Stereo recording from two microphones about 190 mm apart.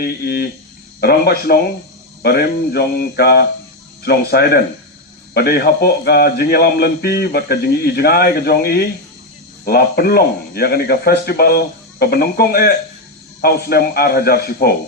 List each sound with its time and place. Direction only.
0.0 s a man's voice: 55° left (ahead or behind)